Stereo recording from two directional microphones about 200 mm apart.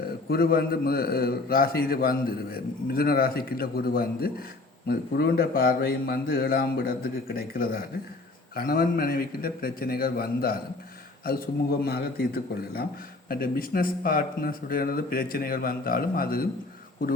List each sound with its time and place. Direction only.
0.3 s a man's voice: 50° left (ahead or behind)